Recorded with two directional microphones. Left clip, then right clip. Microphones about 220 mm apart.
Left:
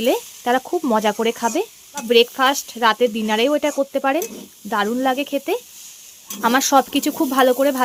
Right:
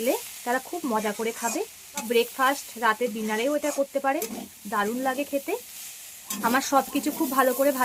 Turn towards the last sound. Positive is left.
turn(degrees=45)  # may be behind; listen again after turning